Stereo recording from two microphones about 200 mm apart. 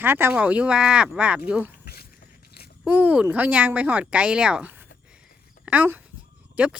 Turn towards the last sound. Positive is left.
turn(degrees=-5)  # may be behind; listen again after turning